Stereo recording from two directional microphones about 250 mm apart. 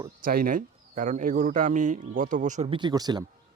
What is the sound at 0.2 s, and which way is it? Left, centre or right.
Speech, right.